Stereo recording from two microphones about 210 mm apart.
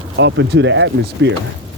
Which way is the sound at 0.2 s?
55° right (ahead or behind).